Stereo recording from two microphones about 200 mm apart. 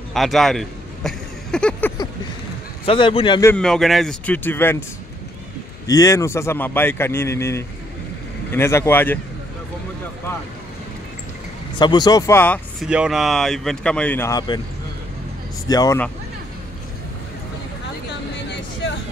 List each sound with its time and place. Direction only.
0.1 s a sound: centre (ahead or behind)
2.8 s speech: 25° left (ahead or behind)
3.4 s speech: 5° left (ahead or behind)
5.9 s speech: 15° left (ahead or behind)
11.8 s speech: 20° left (ahead or behind)
12.8 s speech: 5° right (ahead or behind); by 14.6 s 15° left (ahead or behind)
15.7 s speech: 20° left (ahead or behind)
18.3 s a sound: 60° left (ahead or behind)